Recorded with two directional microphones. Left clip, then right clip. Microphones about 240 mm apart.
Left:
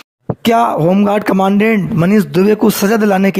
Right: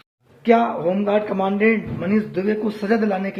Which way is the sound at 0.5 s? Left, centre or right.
Left.